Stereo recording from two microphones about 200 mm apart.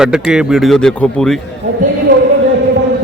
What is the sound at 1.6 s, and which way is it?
Speech, 40° right (ahead or behind).